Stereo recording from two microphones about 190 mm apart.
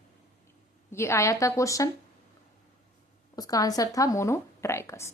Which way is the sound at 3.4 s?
20° left (ahead or behind).